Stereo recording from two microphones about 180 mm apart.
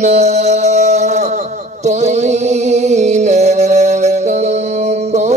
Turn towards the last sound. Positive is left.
turn(degrees=-40)  # may be behind; listen again after turning